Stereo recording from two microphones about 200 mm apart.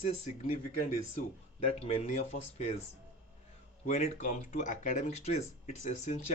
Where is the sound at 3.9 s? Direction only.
35° left (ahead or behind).